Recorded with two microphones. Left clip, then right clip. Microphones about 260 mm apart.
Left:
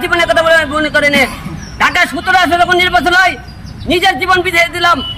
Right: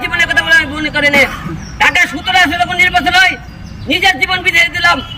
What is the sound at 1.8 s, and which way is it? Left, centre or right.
A man's voice, centre.